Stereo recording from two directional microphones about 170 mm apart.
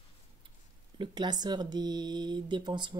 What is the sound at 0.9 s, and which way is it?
Speech, 25° right (ahead or behind).